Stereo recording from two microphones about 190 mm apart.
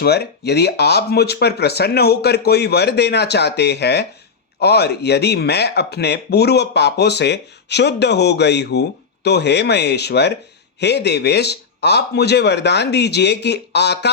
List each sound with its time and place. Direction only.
0.0 s speech: 60° left (ahead or behind)